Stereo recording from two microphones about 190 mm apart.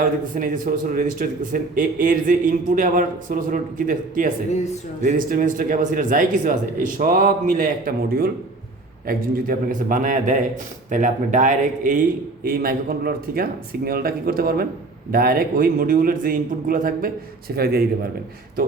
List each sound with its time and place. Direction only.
0.3 s a man's voice: 45° right (ahead or behind)